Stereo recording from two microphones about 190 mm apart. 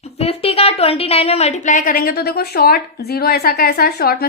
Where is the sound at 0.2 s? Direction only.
30° left (ahead or behind).